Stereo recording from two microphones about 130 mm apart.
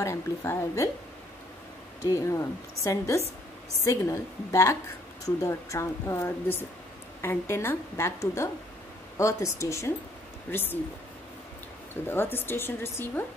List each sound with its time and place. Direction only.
0.0 s speech: 20° left (ahead or behind)
2.0 s a woman's voice: 25° left (ahead or behind)
11.9 s a woman's voice: 15° left (ahead or behind)